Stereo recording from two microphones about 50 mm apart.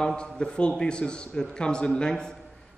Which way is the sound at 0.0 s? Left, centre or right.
Centre.